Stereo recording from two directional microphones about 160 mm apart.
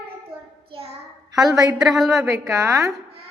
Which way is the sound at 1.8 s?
Centre (ahead or behind).